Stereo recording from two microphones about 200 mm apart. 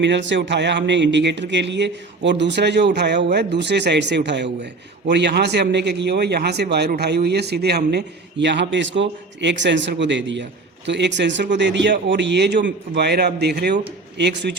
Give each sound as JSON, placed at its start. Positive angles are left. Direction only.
{"t": 0.0, "sound": "speech", "side_deg": -65}